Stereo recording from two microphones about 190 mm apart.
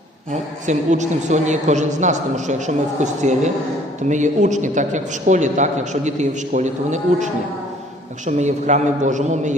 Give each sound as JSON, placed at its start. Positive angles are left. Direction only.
{"t": 0.3, "sound": "a woman's voice", "side_deg": -40}
{"t": 8.4, "sound": "a woman's voice", "side_deg": -40}